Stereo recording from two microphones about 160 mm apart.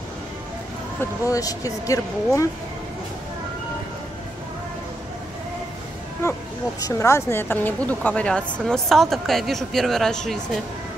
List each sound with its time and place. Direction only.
1.2 s speech: 20° left (ahead or behind)
6.8 s speech: 15° left (ahead or behind)